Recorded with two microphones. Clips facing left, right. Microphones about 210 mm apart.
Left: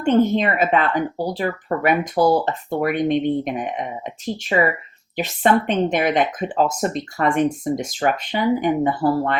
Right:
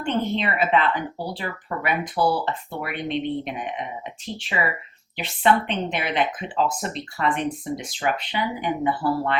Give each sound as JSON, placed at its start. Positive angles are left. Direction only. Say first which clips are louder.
{"t": 0.0, "sound": "speech", "louder": "left 8 dB", "side_deg": 45}